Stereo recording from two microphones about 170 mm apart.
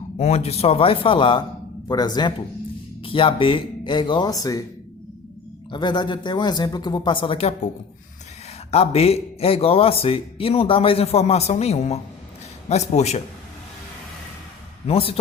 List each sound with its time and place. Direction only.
0.2 s speech: 40° left (ahead or behind); by 4.6 s 20° left (ahead or behind)
5.7 s speech: 25° left (ahead or behind)
8.7 s speech: 35° left (ahead or behind)
14.8 s speech: 35° left (ahead or behind)